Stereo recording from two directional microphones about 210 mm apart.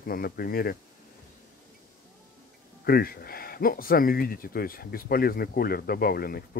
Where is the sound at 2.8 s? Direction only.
45° left (ahead or behind).